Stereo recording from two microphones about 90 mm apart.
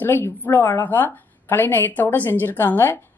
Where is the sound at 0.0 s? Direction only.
25° left (ahead or behind).